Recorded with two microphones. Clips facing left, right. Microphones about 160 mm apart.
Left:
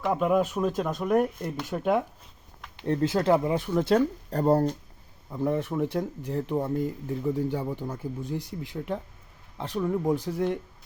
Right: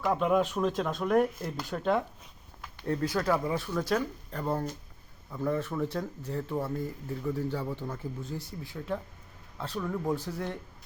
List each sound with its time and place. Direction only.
0.0 s speech: 5° left (ahead or behind)
1.7 s speech: 10° left (ahead or behind)
2.7 s speech: 20° left (ahead or behind); by 4.6 s 40° left (ahead or behind)
5.3 s speech: 20° left (ahead or behind)